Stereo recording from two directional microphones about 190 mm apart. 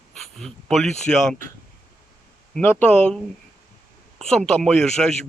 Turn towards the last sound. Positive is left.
turn(degrees=0)  # may be behind; listen again after turning